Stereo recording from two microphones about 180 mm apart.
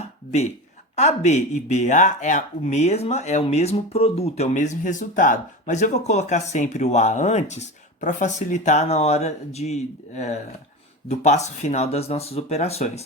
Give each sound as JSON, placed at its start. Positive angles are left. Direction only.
{"t": 0.9, "sound": "speech", "side_deg": 40}